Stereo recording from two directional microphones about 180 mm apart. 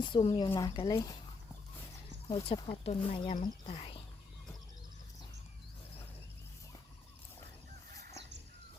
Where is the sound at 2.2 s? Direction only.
30° left (ahead or behind).